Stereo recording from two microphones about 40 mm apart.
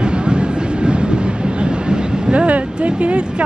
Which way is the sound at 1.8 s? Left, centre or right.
Right.